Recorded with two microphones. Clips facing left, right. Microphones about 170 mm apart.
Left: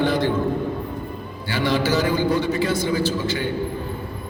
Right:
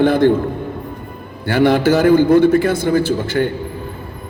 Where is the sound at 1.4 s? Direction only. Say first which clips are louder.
Right 9 dB; 55° right (ahead or behind).